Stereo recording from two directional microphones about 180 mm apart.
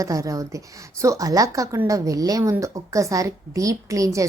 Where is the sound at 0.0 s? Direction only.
20° right (ahead or behind).